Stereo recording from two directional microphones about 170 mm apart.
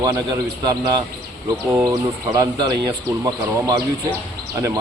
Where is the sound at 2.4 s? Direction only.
25° right (ahead or behind).